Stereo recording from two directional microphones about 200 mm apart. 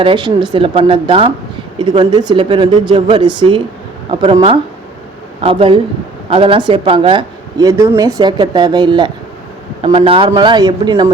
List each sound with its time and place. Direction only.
0.0 s speech: 25° right (ahead or behind)